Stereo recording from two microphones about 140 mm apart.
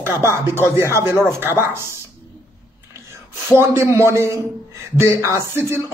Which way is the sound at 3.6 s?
20° right (ahead or behind).